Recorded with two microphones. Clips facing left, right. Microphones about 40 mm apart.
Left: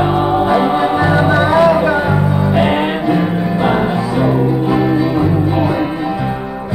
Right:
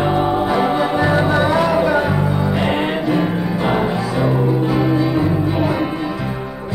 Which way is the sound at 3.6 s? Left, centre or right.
Centre.